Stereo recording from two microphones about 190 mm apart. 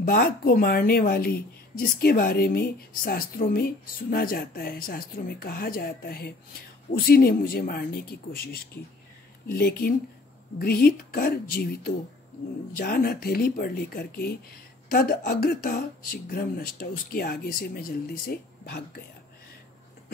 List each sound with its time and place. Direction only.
0.0 s a woman's voice: 50° left (ahead or behind)